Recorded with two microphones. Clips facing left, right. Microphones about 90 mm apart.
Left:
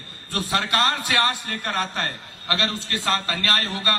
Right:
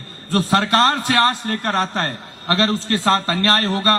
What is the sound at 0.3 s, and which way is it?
A man's voice, 35° right (ahead or behind).